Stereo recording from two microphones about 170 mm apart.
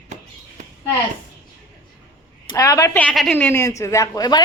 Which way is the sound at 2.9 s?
5° left (ahead or behind).